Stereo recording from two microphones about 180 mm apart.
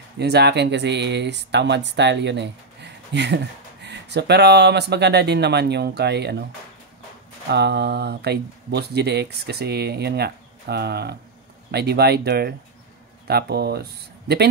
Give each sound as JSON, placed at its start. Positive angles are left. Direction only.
{"t": 0.2, "sound": "speech", "side_deg": -65}
{"t": 7.4, "sound": "speech", "side_deg": -65}